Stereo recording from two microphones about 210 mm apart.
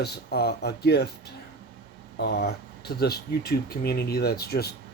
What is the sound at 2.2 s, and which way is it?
Speech, 50° left (ahead or behind).